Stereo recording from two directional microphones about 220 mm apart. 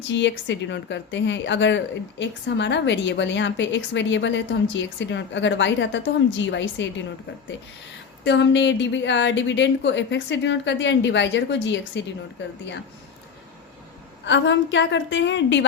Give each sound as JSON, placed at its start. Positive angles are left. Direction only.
{"t": 0.1, "sound": "speech", "side_deg": 55}
{"t": 8.2, "sound": "speech", "side_deg": 55}
{"t": 14.3, "sound": "speech", "side_deg": 55}